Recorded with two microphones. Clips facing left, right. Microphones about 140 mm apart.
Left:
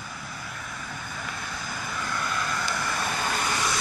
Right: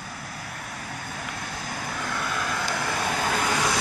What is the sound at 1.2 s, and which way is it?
Vehicle, 65° right (ahead or behind).